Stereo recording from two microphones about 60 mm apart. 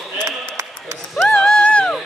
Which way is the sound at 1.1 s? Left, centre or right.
Centre.